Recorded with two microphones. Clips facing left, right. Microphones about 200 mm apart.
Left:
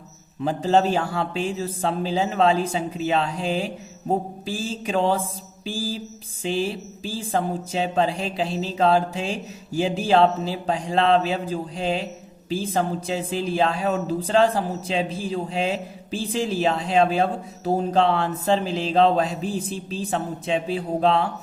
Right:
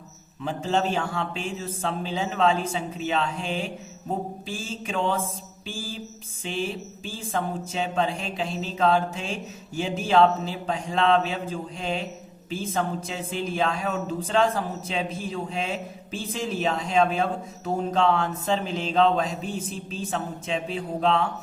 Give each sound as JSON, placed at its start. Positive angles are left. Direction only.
{"t": 0.4, "sound": "speech", "side_deg": 35}